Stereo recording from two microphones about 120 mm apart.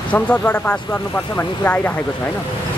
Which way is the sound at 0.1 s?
10° left (ahead or behind).